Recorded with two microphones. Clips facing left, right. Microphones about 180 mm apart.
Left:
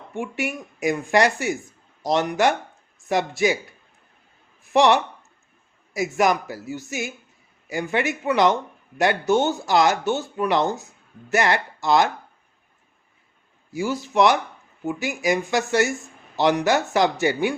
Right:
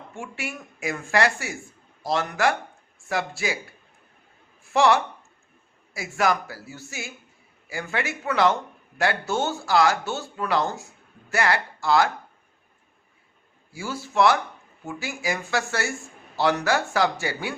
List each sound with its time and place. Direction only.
0.1 s speech: 20° left (ahead or behind)
4.6 s speech: 20° left (ahead or behind)
13.7 s speech: 20° left (ahead or behind)